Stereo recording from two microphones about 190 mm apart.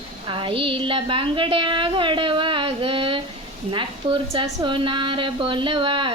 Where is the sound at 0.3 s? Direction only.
25° right (ahead or behind).